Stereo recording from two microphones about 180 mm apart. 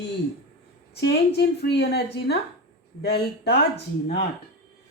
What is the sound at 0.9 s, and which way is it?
A woman's voice, 65° left (ahead or behind).